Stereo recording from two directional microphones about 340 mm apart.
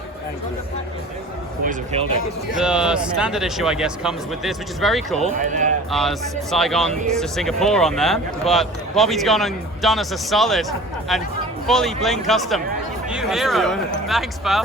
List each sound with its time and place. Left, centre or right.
2.6 s speech: centre
5.4 s speech: right
5.9 s speech: centre